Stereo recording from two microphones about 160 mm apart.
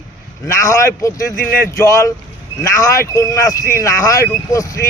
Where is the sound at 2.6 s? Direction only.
20° left (ahead or behind).